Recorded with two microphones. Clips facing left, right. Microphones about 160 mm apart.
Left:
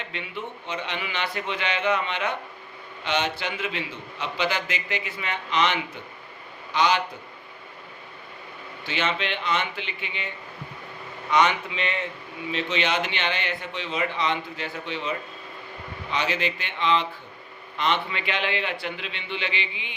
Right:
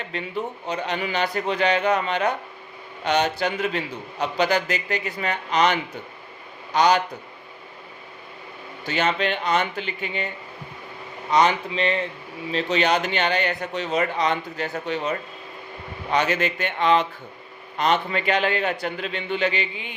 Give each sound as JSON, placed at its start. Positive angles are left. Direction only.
{"t": 0.0, "sound": "a man's voice", "side_deg": -40}
{"t": 8.8, "sound": "a man's voice", "side_deg": -40}